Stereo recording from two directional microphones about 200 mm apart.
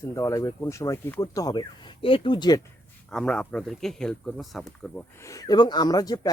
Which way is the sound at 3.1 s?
5° left (ahead or behind).